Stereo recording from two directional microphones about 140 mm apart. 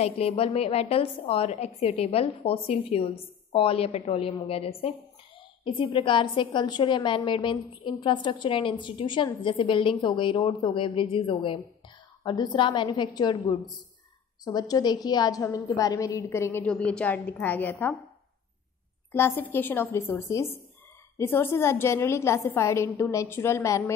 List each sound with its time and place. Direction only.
0.0 s a woman's voice: 45° left (ahead or behind); by 16.6 s 20° left (ahead or behind)
16.6 s a woman's voice: 5° left (ahead or behind)
19.1 s a woman's voice: 15° left (ahead or behind)